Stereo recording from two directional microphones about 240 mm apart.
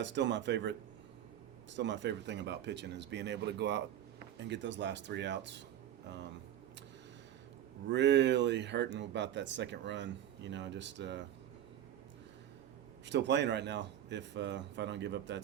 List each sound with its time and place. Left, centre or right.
0.0 s speech: right
7.9 s speech: right
13.1 s speech: right